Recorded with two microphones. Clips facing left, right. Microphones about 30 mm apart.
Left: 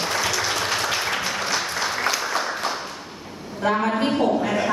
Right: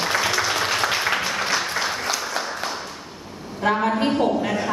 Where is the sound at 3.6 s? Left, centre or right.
Centre.